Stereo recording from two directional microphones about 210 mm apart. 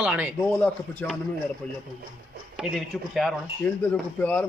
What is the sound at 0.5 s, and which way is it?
Speech, 5° left (ahead or behind).